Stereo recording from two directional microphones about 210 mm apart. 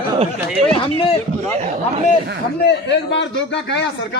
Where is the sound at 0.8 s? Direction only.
25° left (ahead or behind).